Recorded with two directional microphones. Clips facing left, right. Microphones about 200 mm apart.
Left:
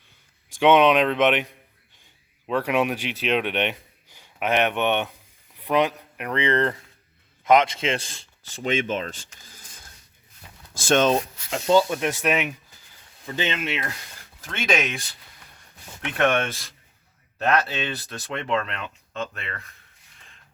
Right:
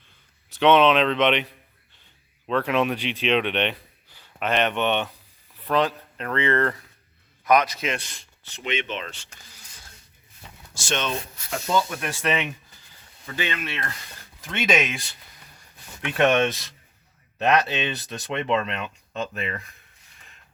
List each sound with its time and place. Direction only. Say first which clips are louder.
0.5 s speech: left 1 dB; 10° left (ahead or behind)
2.5 s a man's voice: even; 10° left (ahead or behind); by 8.2 s 25° left (ahead or behind)
8.6 s speech: left 5 dB; 45° left (ahead or behind)
10.8 s speech: left 9 dB; 45° left (ahead or behind)
11.5 s a man's voice: left 5 dB; 30° left (ahead or behind)
12.0 s speech: left 2 dB; 10° left (ahead or behind)
13.2 s a man's voice: left 3 dB; 20° left (ahead or behind)
14.4 s speech: right 1 dB; centre (ahead or behind)
16.1 s speech: right 2 dB; 20° right (ahead or behind)
19.1 s speech: right 3 dB; 5° right (ahead or behind)